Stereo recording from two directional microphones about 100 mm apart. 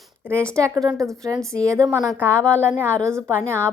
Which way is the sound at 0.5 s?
30° right (ahead or behind).